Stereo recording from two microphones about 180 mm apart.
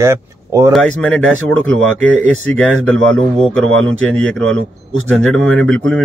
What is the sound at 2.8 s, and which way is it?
Speech, 5° left (ahead or behind).